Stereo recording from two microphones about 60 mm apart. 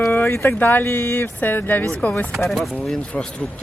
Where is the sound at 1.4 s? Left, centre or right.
Left.